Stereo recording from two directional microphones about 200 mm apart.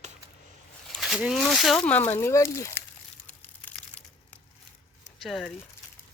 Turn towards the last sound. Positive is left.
turn(degrees=0)  # may be behind; listen again after turning